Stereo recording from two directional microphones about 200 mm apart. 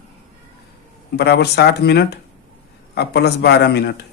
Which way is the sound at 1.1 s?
55° left (ahead or behind).